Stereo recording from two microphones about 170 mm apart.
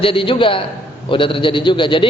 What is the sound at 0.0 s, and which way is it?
A man's voice, 30° left (ahead or behind).